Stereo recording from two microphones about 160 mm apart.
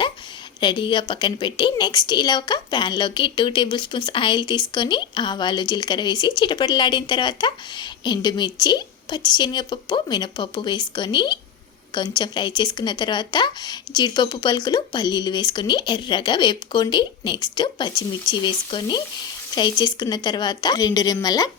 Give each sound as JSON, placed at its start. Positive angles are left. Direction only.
{"t": 0.6, "sound": "a woman's voice", "side_deg": 30}